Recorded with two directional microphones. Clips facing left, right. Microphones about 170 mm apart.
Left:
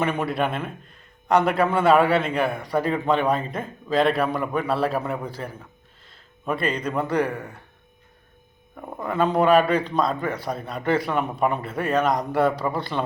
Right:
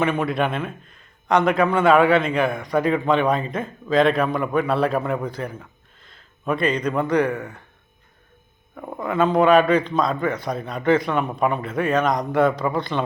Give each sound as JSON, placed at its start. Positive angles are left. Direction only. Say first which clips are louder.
{"t": 0.1, "sound": "a man's voice", "louder": "right 2 dB", "side_deg": 5}
{"t": 1.7, "sound": "speech", "louder": "right 2 dB", "side_deg": 35}
{"t": 2.1, "sound": "a man's voice", "louder": "right 3 dB", "side_deg": 10}
{"t": 2.6, "sound": "speech", "louder": "right 3 dB", "side_deg": 35}
{"t": 3.9, "sound": "a man's voice", "louder": "right 3 dB", "side_deg": 5}
{"t": 8.7, "sound": "a man's voice", "louder": "right 3 dB", "side_deg": 5}